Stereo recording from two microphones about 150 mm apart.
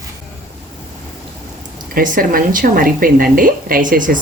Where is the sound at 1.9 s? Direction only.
70° right (ahead or behind).